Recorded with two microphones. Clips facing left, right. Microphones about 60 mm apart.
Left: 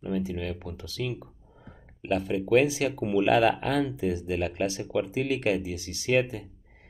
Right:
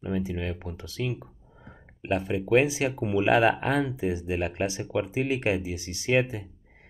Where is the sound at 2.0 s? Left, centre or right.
Right.